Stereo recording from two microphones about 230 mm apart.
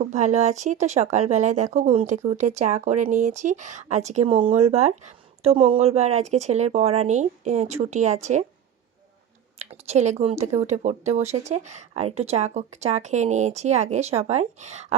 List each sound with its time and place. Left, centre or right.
0.0 s speech: right
9.6 s speech: right